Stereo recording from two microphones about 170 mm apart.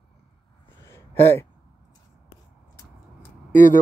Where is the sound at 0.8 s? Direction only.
15° left (ahead or behind).